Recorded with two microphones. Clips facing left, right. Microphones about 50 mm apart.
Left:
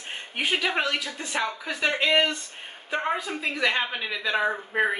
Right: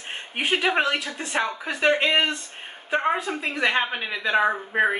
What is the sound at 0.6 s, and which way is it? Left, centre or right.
A woman's voice, right.